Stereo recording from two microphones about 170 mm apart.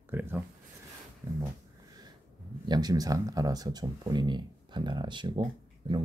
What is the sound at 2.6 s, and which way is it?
Speech, 25° right (ahead or behind).